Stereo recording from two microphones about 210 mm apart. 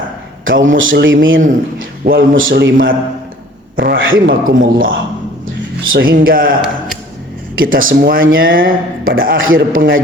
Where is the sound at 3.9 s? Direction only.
65° right (ahead or behind).